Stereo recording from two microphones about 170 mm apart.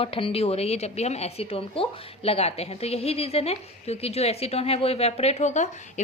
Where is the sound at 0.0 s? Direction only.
30° left (ahead or behind).